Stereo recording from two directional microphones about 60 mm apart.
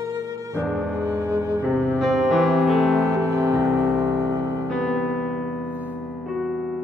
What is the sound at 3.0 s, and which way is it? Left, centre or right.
Music, right.